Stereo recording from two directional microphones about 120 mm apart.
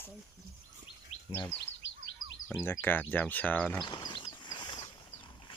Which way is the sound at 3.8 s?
40° left (ahead or behind).